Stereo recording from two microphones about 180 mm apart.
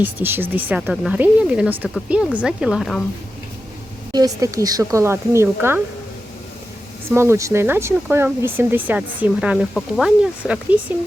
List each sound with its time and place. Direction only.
0.0 s speech: 10° right (ahead or behind)
4.1 s speech: 20° right (ahead or behind)
7.1 s speech: 15° right (ahead or behind)